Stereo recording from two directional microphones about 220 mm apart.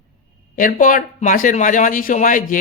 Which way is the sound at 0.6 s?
40° left (ahead or behind).